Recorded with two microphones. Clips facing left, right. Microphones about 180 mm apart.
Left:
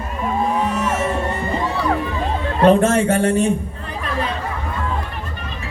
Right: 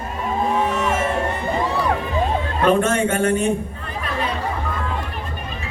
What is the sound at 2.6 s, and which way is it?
Speech, 35° left (ahead or behind).